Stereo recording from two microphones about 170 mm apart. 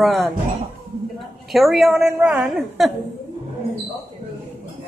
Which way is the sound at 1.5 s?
Centre (ahead or behind).